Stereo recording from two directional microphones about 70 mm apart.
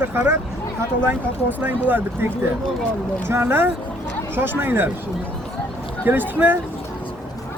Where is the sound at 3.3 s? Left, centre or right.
Right.